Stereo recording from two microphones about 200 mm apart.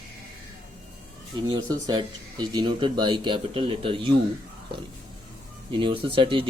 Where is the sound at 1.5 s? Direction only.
20° right (ahead or behind).